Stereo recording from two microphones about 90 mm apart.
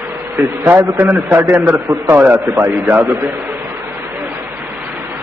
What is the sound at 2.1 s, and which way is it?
A man's voice, 25° right (ahead or behind).